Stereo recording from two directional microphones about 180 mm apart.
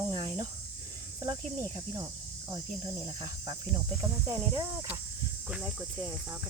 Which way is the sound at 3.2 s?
25° right (ahead or behind).